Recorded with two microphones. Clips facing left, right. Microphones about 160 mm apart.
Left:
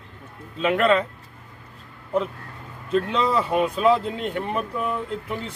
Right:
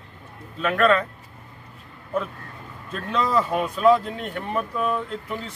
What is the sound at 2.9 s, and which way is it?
Speech, 20° left (ahead or behind).